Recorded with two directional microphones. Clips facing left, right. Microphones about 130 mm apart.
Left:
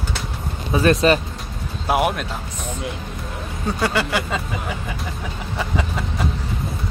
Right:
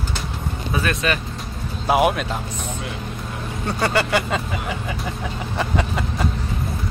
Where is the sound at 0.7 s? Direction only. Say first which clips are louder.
Left 8 dB; 35° left (ahead or behind).